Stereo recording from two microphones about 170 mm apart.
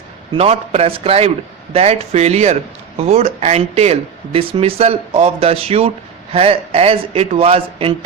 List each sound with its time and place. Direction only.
0.3 s speech: 40° right (ahead or behind)